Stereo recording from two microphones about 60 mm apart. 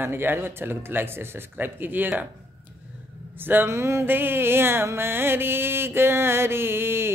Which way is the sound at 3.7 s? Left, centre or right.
Right.